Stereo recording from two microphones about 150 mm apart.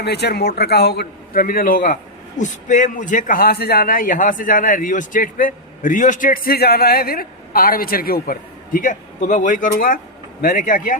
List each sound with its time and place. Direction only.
0.0 s a man's voice: 90° left; by 10.9 s 60° left (ahead or behind)